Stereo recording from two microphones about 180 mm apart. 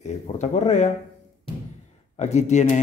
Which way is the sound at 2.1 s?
40° left (ahead or behind).